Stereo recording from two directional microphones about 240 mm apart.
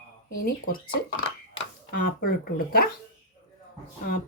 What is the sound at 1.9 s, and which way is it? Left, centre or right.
Speech, left.